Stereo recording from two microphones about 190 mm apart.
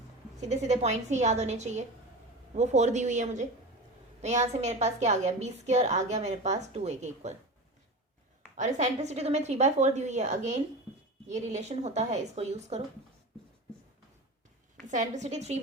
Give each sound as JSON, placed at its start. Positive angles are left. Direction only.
{"t": 0.4, "sound": "a woman's voice", "side_deg": -35}
{"t": 8.5, "sound": "a woman's voice", "side_deg": -40}
{"t": 14.8, "sound": "a woman's voice", "side_deg": -40}